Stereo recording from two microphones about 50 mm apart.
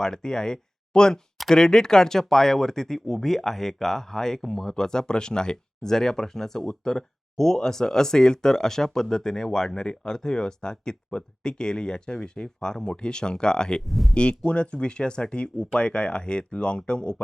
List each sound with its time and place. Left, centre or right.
0.0 s speech: centre
13.8 s speech: centre
14.1 s speech: left